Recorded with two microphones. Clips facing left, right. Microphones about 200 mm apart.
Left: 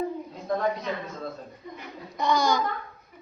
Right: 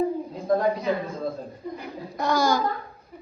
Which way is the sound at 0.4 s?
30° right (ahead or behind).